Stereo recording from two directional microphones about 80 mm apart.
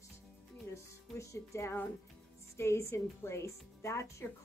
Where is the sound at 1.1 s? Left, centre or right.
Left.